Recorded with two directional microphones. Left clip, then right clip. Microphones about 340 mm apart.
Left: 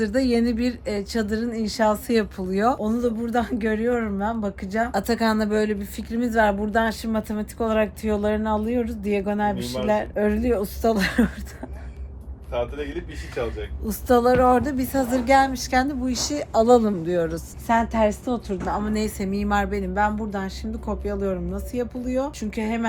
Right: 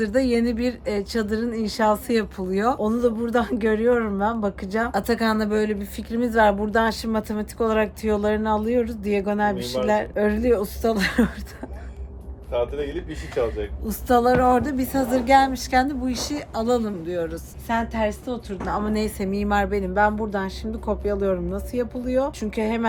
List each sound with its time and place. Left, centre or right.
0.0 s speech: centre
12.5 s a man's voice: right
13.8 s speech: centre
18.7 s speech: centre